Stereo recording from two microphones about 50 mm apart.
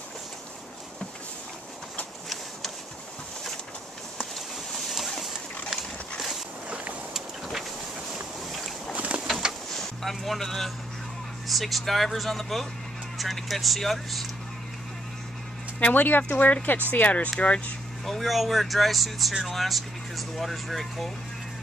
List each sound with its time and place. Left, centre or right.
4.7 s vehicle: centre
6.1 s a sound: centre
6.7 s boat: right
8.5 s boat: centre
8.9 s boat: right
9.2 s bird: centre
9.7 s a sound: centre
11.4 s speech: centre
15.8 s speech: left
18.0 s speech: centre